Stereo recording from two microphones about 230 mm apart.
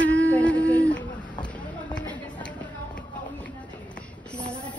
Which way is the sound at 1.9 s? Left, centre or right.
Centre.